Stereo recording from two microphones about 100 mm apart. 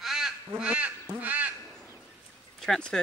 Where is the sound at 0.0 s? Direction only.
5° right (ahead or behind).